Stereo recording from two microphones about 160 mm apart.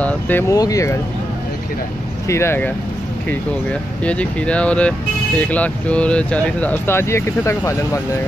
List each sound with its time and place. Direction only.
0.0 s speech: 15° left (ahead or behind)
2.2 s speech: 15° left (ahead or behind)
4.0 s speech: 10° left (ahead or behind)